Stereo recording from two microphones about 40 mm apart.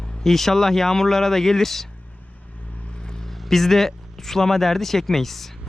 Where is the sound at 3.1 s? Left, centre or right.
Centre.